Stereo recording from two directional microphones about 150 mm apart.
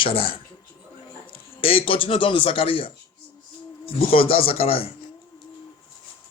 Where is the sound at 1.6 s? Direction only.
40° left (ahead or behind).